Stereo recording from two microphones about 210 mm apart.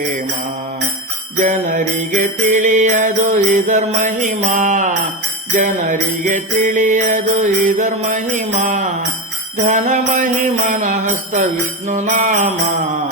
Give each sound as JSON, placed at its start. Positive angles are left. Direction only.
{"t": 1.4, "sound": "jingle bell", "side_deg": -35}